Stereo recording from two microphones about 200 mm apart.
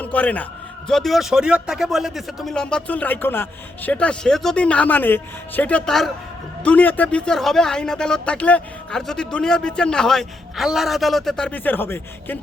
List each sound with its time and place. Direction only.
0.0 s a man's voice: 5° left (ahead or behind)